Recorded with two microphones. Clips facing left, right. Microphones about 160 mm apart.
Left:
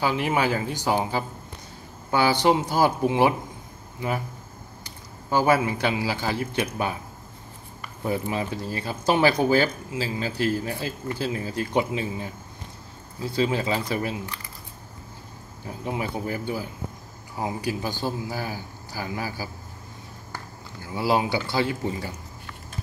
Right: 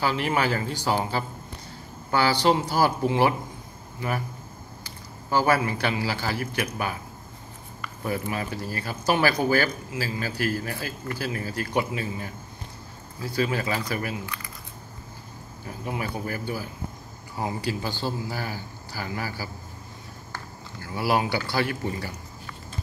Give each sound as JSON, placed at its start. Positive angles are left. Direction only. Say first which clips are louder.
{"t": 0.0, "sound": "a man's voice", "louder": "left 1 dB", "side_deg": 15}
{"t": 8.0, "sound": "speech", "louder": "left 2 dB", "side_deg": 20}
{"t": 15.8, "sound": "speech", "louder": "left 2 dB", "side_deg": 20}
{"t": 20.8, "sound": "speech", "louder": "left 1 dB", "side_deg": 20}